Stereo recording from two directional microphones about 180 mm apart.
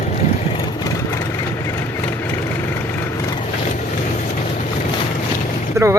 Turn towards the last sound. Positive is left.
turn(degrees=-15)  # may be behind; listen again after turning